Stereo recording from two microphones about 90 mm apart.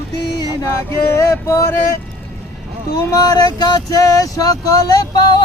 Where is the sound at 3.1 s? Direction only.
40° left (ahead or behind).